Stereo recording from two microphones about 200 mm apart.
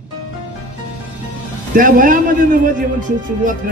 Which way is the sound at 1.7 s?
45° right (ahead or behind).